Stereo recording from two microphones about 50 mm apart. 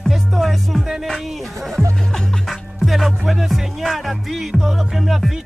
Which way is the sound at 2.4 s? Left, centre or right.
Centre.